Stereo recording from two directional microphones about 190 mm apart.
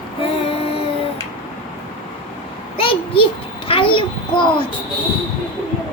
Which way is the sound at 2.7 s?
30° left (ahead or behind).